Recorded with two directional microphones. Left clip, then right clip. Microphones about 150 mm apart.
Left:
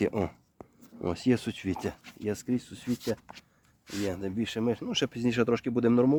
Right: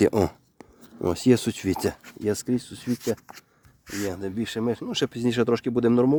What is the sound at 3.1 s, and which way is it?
Speech, 55° right (ahead or behind).